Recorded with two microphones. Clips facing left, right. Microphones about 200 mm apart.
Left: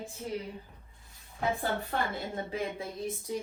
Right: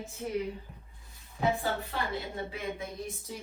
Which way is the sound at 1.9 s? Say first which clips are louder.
Left 3 dB; 50° left (ahead or behind).